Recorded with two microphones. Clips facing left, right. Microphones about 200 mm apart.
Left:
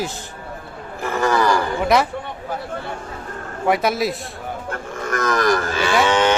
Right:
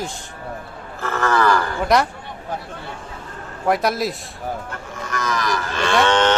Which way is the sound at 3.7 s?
Centre (ahead or behind).